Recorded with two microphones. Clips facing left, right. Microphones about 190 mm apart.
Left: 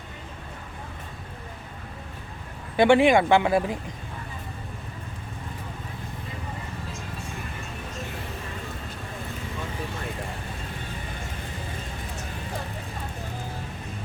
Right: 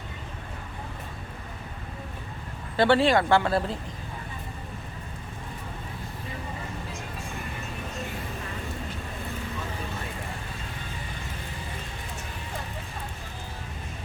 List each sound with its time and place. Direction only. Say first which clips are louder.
2.7 s speech: left 3 dB; 15° left (ahead or behind)